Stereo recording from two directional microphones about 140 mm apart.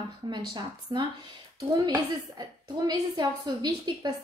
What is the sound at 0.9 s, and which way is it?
Speech, 35° right (ahead or behind).